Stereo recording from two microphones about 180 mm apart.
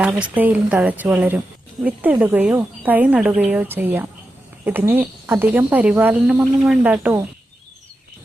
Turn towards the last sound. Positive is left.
turn(degrees=-10)  # may be behind; listen again after turning